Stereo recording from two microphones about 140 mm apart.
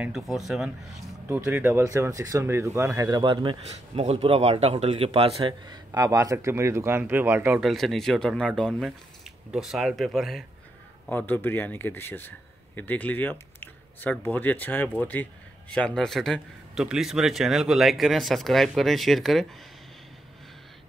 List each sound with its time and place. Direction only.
0.0 s a man's voice: 5° right (ahead or behind)
1.3 s speech: 15° right (ahead or behind); by 3.5 s 35° right (ahead or behind)
3.6 s a man's voice: 50° right (ahead or behind)
5.5 s speech: 25° right (ahead or behind)
7.6 s a man's voice: centre (ahead or behind)
11.1 s a man's voice: 15° left (ahead or behind)